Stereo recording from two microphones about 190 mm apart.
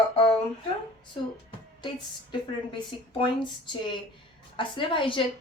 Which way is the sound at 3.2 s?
25° left (ahead or behind).